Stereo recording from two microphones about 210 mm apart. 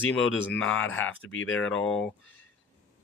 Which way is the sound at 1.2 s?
70° left (ahead or behind).